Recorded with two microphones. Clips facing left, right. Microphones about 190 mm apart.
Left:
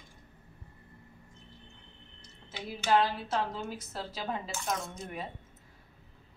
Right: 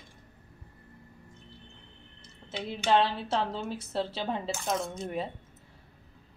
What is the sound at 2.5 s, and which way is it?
A woman's voice, 25° right (ahead or behind).